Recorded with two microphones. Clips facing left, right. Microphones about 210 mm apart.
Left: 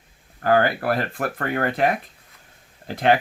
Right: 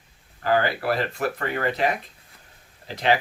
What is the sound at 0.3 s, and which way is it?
Speech, 50° left (ahead or behind).